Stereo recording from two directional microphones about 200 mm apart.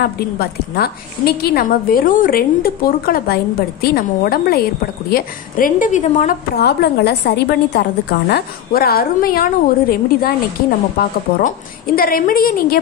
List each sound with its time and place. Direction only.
0.0 s a woman's voice: 50° left (ahead or behind)
6.5 s a woman's voice: 55° left (ahead or behind)